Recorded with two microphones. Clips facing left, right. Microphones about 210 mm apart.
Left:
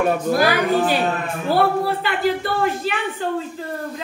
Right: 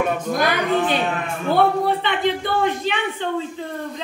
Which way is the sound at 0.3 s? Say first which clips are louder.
Left 2 dB; 5° left (ahead or behind).